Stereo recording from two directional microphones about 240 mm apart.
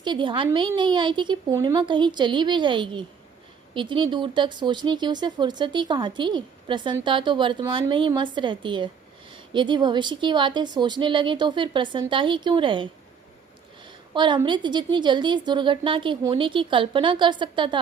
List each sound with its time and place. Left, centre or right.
0.0 s speech: centre
14.1 s speech: centre